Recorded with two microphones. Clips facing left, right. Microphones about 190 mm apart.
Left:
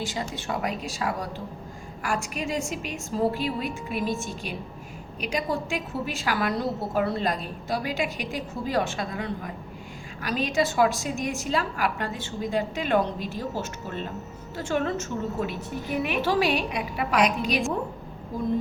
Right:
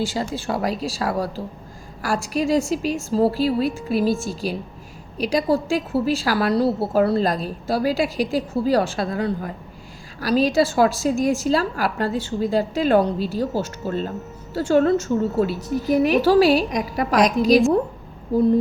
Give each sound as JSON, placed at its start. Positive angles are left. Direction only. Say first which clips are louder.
{"t": 0.0, "sound": "a woman's voice", "louder": "right 7 dB", "side_deg": -30}